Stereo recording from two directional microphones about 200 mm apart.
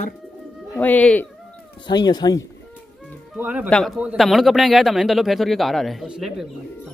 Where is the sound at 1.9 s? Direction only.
20° left (ahead or behind).